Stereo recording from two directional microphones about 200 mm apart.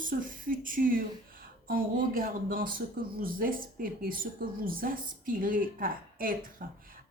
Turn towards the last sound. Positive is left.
turn(degrees=-45)  # may be behind; listen again after turning